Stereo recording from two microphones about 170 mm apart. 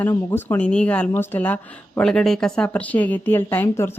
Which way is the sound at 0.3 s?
10° left (ahead or behind).